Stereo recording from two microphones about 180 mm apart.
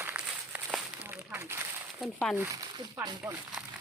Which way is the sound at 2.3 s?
15° right (ahead or behind).